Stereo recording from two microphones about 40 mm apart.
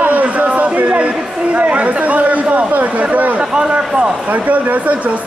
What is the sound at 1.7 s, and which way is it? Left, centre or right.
Chatter, right.